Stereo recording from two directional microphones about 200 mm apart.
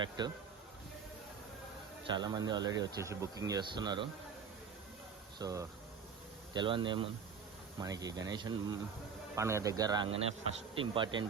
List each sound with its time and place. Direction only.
0.2 s speech: 20° right (ahead or behind)
2.0 s speech: 20° right (ahead or behind)
5.4 s speech: 15° right (ahead or behind)